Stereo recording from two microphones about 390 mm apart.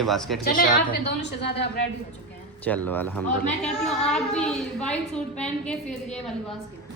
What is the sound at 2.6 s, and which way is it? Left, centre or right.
Speech, centre.